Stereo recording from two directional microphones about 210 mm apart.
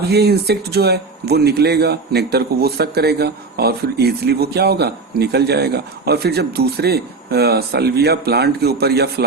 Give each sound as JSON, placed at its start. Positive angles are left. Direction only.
{"t": 0.1, "sound": "speech", "side_deg": -50}